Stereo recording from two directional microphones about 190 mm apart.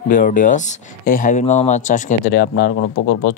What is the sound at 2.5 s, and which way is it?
Speech, 55° left (ahead or behind).